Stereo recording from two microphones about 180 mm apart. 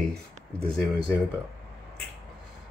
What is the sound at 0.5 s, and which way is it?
Speech, 30° right (ahead or behind).